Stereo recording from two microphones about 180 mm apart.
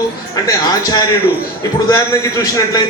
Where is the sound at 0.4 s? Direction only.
20° left (ahead or behind).